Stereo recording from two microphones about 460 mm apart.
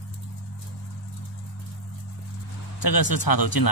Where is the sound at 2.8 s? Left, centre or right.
Left.